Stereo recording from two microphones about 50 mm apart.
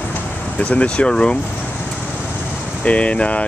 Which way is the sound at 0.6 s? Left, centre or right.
Left.